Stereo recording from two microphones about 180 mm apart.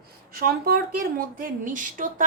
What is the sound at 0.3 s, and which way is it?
A woman's voice, 55° right (ahead or behind).